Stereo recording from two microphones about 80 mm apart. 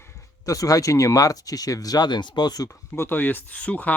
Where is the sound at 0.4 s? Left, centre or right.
Left.